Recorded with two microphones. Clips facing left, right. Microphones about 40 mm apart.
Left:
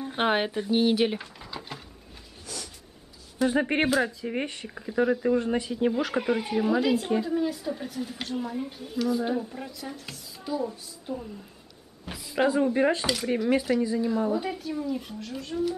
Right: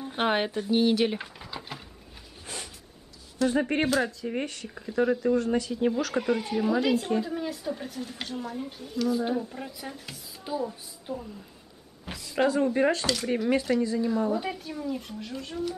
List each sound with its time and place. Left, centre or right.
0.0 s speech: centre
1.1 s a sound: centre
2.4 s vehicle: right
3.3 s speech: centre
3.8 s speech: centre
4.7 s speech: centre
5.8 s speech: centre
9.7 s speech: centre
12.1 s speech: centre